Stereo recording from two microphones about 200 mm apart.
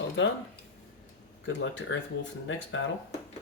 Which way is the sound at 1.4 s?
70° left (ahead or behind).